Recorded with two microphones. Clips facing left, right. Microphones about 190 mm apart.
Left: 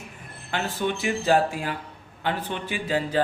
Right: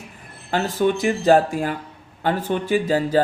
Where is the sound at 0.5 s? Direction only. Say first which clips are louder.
Right 7 dB; 40° right (ahead or behind).